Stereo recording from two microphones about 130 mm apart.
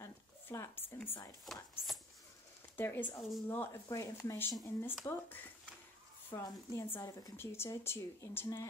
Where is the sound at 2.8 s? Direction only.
15° left (ahead or behind).